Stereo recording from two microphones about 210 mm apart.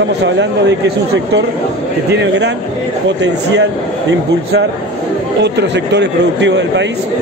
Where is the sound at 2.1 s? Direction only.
55° right (ahead or behind).